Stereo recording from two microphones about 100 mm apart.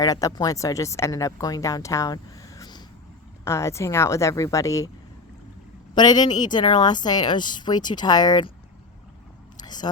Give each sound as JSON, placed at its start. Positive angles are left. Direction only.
{"t": 0.0, "sound": "speech", "side_deg": 35}
{"t": 3.4, "sound": "speech", "side_deg": 30}
{"t": 5.9, "sound": "a woman's voice", "side_deg": 45}
{"t": 9.6, "sound": "a sound", "side_deg": 45}